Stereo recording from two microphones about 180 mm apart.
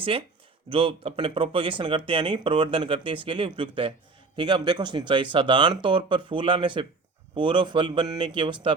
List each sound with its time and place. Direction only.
0.0 s speech: 30° right (ahead or behind)